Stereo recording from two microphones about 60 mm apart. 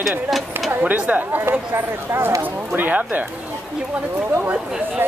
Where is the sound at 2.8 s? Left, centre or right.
Right.